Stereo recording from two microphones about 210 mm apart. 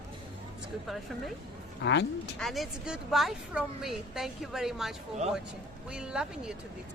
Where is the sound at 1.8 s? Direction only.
55° left (ahead or behind).